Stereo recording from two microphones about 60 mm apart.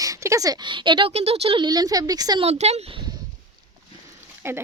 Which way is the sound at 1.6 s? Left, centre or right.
Right.